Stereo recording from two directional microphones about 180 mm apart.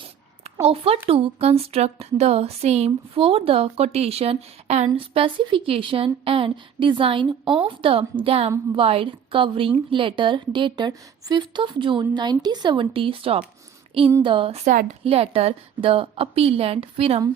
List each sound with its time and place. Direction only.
0.6 s a woman's voice: 35° right (ahead or behind)